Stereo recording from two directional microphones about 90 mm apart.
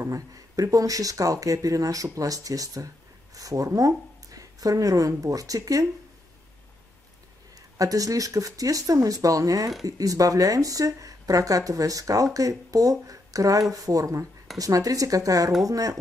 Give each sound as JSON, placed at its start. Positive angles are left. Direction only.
{"t": 0.0, "sound": "speech", "side_deg": -40}
{"t": 7.7, "sound": "speech", "side_deg": -40}